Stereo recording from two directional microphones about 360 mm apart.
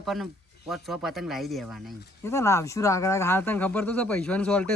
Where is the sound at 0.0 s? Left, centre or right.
Centre.